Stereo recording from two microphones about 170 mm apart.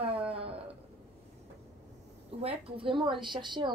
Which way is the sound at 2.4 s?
35° right (ahead or behind).